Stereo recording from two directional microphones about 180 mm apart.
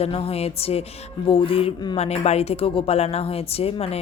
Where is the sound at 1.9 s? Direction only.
35° left (ahead or behind).